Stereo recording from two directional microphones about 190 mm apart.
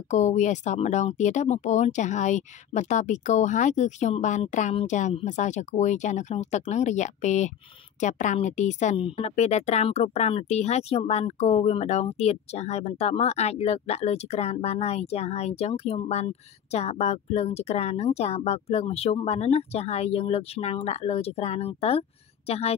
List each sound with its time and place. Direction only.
0.1 s a woman's voice: 40° left (ahead or behind)